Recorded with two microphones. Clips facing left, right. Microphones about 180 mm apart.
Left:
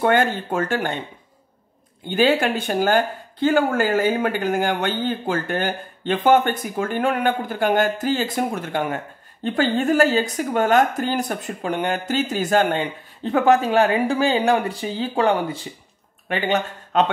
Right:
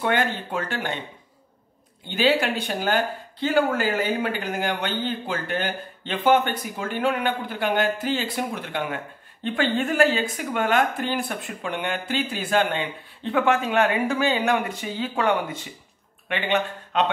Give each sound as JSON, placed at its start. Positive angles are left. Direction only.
{"t": 0.0, "sound": "speech", "side_deg": 45}
{"t": 2.0, "sound": "speech", "side_deg": 50}